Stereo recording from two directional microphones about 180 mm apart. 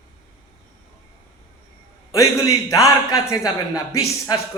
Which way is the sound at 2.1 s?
20° left (ahead or behind).